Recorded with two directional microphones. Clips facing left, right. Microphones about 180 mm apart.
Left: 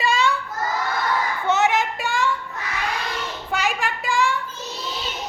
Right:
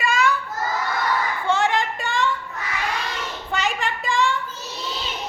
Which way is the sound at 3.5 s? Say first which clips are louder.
Left 1 dB; centre (ahead or behind).